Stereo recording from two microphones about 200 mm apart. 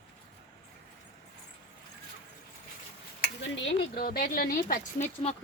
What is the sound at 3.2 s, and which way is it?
Speech, 60° left (ahead or behind).